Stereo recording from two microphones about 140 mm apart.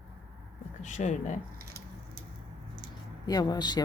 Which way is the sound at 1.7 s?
90° right.